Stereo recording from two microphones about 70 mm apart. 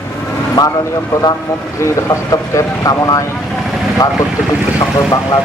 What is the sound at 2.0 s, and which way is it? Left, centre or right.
Speech, left.